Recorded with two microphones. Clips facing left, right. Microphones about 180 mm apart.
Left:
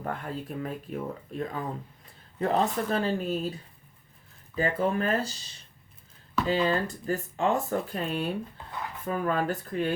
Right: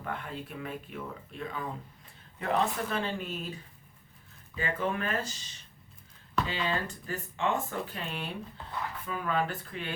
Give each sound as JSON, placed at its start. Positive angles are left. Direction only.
{"t": 0.0, "sound": "speech", "side_deg": 40}
{"t": 6.5, "sound": "speech", "side_deg": 40}